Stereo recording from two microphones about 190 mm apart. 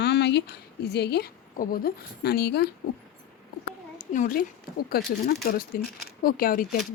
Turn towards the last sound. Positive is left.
turn(degrees=50)  # may be behind; listen again after turning